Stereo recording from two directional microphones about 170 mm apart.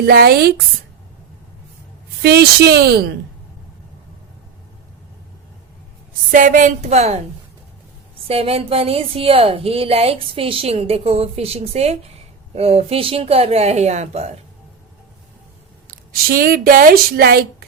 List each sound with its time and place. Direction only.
0.0 s speech: 65° right (ahead or behind)
2.2 s speech: 70° right (ahead or behind)
6.3 s speech: 50° right (ahead or behind)
8.3 s a woman's voice: 35° right (ahead or behind)
15.9 s speech: 55° right (ahead or behind)